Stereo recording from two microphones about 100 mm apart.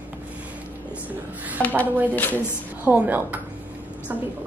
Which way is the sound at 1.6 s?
20° left (ahead or behind).